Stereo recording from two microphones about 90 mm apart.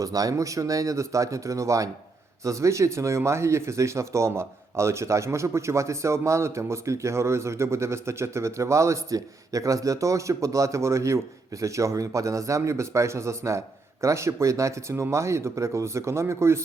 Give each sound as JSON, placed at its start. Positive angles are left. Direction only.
{"t": 0.0, "sound": "speech", "side_deg": -40}